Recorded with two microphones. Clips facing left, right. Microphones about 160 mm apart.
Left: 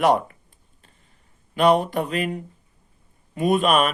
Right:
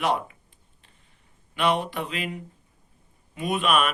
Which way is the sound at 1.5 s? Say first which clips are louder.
Left 7 dB; 40° left (ahead or behind).